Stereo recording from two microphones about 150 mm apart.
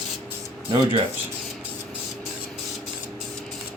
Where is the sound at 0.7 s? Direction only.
35° right (ahead or behind).